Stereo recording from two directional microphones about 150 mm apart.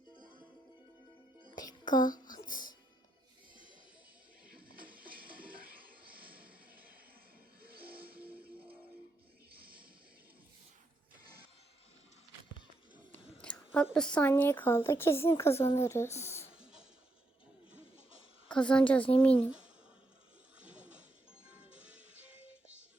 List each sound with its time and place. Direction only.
1.5 s music: 30° left (ahead or behind)
4.4 s music: 75° right (ahead or behind)
6.3 s a sound: 75° right (ahead or behind)
7.6 s music: 85° right
9.5 s a sound: 80° right
13.1 s a sound: 10° left (ahead or behind)
13.9 s speech: 5° left (ahead or behind)
16.5 s music: 5° right (ahead or behind)
18.4 s a woman's voice: 5° left (ahead or behind)
20.6 s music: 10° right (ahead or behind)